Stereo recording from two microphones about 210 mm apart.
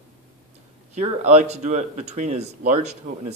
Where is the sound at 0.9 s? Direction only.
30° right (ahead or behind).